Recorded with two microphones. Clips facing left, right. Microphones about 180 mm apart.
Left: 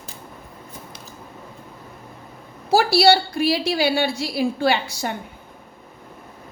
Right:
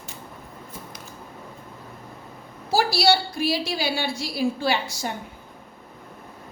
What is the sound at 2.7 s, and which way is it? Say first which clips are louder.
A woman's voice: left 5 dB; 60° left (ahead or behind).